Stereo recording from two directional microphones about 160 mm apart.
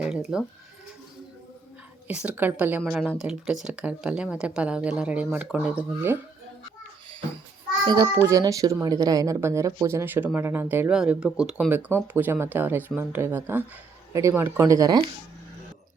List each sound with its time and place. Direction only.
0.0 s bleat: 5° right (ahead or behind)
2.0 s speech: 10° right (ahead or behind)
7.9 s speech: 25° right (ahead or behind)